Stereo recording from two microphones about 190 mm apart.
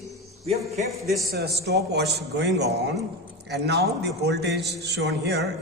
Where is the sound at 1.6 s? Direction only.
60° right (ahead or behind).